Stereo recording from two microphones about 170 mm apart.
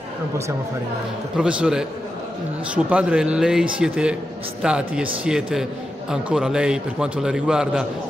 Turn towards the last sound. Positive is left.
turn(degrees=-5)  # may be behind; listen again after turning